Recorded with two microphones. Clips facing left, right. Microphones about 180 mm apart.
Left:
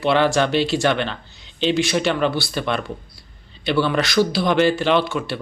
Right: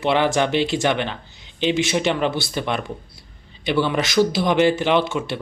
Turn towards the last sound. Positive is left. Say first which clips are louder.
# even
turn(degrees=-20)  # may be behind; listen again after turning